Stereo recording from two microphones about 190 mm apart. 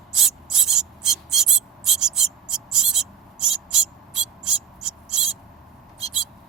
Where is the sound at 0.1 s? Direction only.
Centre (ahead or behind).